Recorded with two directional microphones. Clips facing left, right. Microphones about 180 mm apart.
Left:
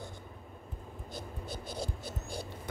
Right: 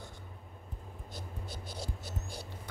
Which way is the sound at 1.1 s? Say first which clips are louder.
Left 4 dB; 55° left (ahead or behind).